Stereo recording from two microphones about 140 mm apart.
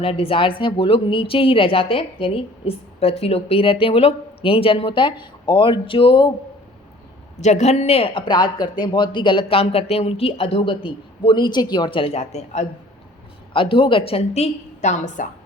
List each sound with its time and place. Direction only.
0.0 s speech: 40° left (ahead or behind)
7.4 s speech: 55° left (ahead or behind)
13.5 s a woman's voice: 40° left (ahead or behind); by 15.3 s 60° left (ahead or behind)